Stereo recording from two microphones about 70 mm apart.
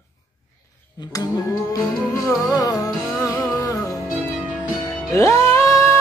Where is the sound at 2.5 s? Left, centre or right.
Left.